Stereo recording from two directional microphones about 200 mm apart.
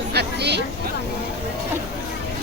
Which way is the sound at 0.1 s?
55° right (ahead or behind).